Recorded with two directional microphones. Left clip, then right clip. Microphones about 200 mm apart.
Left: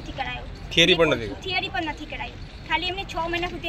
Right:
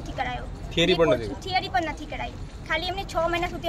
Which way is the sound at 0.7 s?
45° left (ahead or behind).